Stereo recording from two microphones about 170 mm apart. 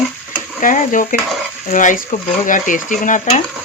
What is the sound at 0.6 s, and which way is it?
Speech, 50° left (ahead or behind).